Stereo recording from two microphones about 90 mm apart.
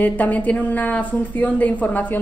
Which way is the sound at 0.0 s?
15° left (ahead or behind).